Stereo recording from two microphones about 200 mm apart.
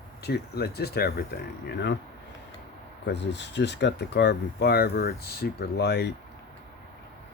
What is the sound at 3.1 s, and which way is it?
Speech, 60° left (ahead or behind).